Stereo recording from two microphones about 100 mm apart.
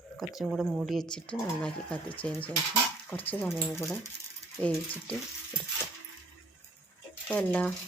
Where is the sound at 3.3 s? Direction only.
20° left (ahead or behind).